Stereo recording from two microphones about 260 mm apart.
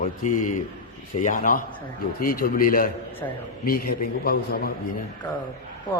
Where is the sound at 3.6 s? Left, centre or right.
Left.